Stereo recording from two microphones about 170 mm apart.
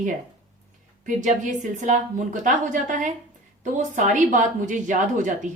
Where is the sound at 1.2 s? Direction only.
45° right (ahead or behind).